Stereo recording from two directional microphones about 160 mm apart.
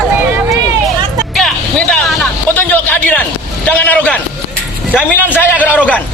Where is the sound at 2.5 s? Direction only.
10° left (ahead or behind).